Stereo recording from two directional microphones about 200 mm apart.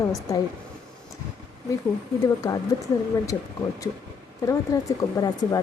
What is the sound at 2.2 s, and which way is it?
Speech, 15° left (ahead or behind).